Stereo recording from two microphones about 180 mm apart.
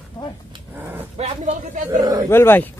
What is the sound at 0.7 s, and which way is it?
Dog, 10° right (ahead or behind).